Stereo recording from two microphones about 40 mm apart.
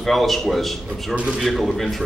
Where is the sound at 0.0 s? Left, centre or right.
Centre.